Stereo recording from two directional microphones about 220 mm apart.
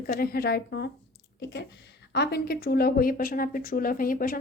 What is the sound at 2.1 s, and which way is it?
A woman's voice, 45° left (ahead or behind).